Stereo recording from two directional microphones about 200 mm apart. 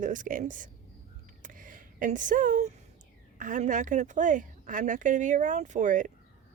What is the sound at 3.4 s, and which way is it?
A woman's voice, 40° right (ahead or behind).